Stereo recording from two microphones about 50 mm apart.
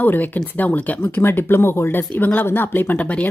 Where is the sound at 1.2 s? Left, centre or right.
Left.